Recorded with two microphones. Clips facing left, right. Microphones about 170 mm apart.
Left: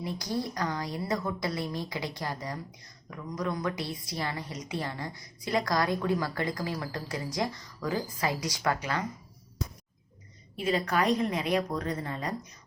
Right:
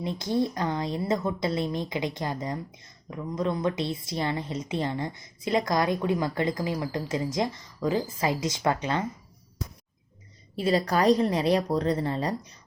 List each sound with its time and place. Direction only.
0.0 s a woman's voice: 25° right (ahead or behind)
10.6 s a woman's voice: 35° right (ahead or behind)